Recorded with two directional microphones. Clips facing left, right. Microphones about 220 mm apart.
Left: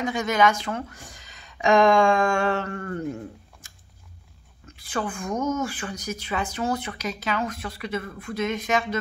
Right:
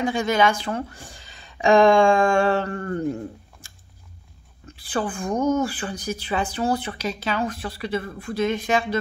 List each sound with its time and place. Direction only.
0.0 s a woman's voice: 30° right (ahead or behind)